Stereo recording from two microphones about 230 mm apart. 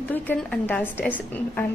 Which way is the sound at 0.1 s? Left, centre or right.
Centre.